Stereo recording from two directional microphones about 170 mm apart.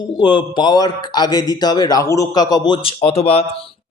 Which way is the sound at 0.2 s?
25° left (ahead or behind).